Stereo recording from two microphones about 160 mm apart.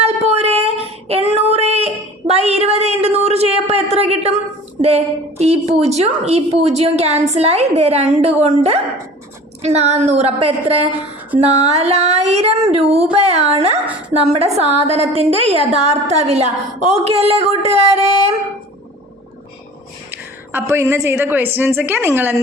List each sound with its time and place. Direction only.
0.0 s child singing: 40° right (ahead or behind)
4.8 s a woman's voice: 40° right (ahead or behind)
20.1 s a woman's voice: 15° right (ahead or behind)